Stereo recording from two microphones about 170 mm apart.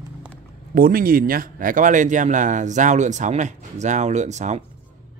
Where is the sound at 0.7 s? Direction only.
60° right (ahead or behind).